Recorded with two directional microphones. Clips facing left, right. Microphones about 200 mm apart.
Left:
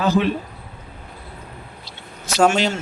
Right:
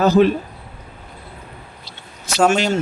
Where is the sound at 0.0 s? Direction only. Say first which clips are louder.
Right 6 dB; 40° right (ahead or behind).